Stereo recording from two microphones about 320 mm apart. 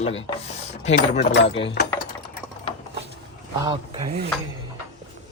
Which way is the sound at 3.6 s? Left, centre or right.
Centre.